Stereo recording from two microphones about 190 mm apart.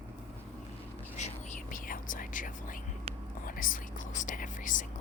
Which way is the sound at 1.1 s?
40° left (ahead or behind).